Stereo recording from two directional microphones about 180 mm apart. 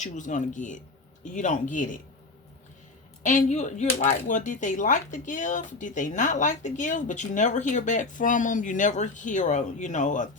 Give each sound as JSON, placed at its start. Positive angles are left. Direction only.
{"t": 0.0, "sound": "speech", "side_deg": 45}
{"t": 3.2, "sound": "speech", "side_deg": 40}